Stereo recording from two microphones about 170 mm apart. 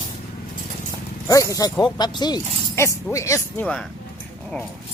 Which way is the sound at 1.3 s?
20° left (ahead or behind).